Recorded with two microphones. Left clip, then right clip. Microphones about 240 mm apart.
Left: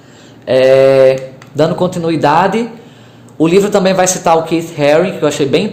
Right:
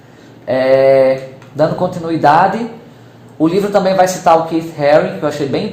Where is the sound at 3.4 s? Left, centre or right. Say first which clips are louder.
Left 3 dB; left.